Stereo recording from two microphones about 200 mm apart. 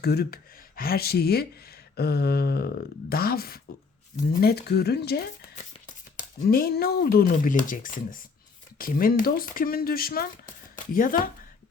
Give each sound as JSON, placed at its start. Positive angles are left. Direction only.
{"t": 0.0, "sound": "speech", "side_deg": 50}
{"t": 6.5, "sound": "speech", "side_deg": 50}